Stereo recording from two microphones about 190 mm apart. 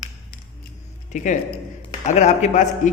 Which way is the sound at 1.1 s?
40° left (ahead or behind).